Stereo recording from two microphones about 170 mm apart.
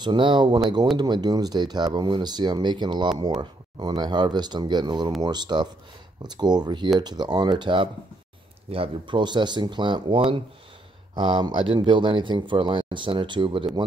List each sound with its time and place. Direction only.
0.0 s speech: 30° right (ahead or behind)